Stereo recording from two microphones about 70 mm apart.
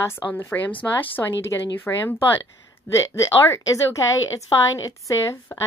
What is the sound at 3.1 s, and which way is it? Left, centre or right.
Speech, left.